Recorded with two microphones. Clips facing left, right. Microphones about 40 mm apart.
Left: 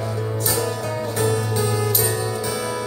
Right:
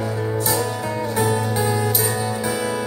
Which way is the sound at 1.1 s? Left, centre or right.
Right.